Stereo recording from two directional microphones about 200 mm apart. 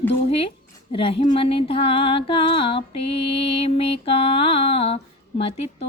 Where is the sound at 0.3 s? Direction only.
30° left (ahead or behind).